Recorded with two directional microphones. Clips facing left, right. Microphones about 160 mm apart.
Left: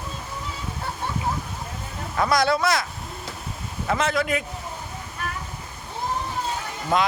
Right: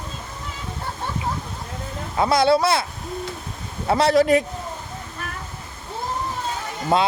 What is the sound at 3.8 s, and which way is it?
Speech, 35° right (ahead or behind).